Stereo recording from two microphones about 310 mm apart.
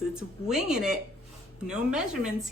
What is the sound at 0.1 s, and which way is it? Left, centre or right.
Speech, centre.